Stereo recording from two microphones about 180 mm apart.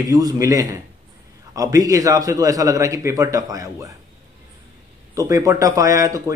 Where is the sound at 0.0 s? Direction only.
20° right (ahead or behind).